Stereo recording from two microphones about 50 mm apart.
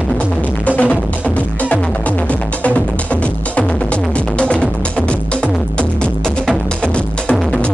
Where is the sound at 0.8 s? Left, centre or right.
Left.